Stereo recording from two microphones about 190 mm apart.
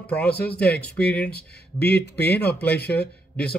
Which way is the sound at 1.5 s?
60° left (ahead or behind).